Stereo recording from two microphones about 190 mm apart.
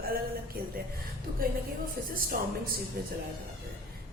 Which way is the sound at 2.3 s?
50° right (ahead or behind).